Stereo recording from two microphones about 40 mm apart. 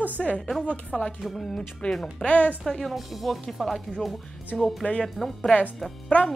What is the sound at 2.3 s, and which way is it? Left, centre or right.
Speech, left.